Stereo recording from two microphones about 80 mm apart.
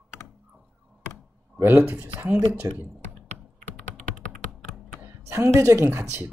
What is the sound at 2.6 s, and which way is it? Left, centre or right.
Speech, right.